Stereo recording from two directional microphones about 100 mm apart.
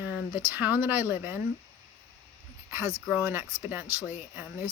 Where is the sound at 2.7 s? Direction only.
30° right (ahead or behind).